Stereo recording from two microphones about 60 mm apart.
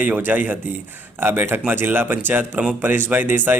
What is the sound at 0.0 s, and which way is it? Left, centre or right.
Speech, right.